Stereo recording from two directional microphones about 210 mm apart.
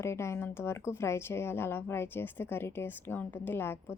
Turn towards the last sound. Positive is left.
turn(degrees=10)  # may be behind; listen again after turning